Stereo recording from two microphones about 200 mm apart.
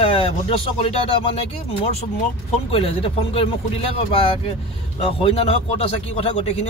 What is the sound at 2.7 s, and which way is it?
Speech, 30° left (ahead or behind).